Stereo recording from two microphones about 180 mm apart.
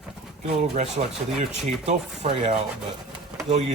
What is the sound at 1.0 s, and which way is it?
Speech, 40° right (ahead or behind).